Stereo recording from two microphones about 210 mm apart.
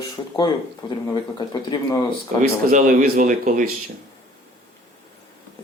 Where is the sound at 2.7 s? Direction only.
40° right (ahead or behind).